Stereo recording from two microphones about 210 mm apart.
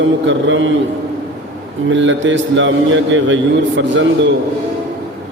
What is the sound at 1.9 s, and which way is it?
A man's voice, 60° right (ahead or behind).